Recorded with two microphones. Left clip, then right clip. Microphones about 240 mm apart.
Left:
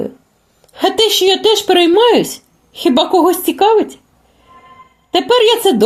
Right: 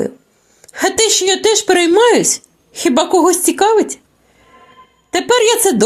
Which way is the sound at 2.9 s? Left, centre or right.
Right.